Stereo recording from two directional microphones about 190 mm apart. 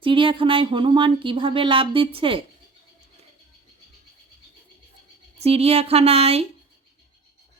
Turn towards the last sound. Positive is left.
turn(degrees=-30)  # may be behind; listen again after turning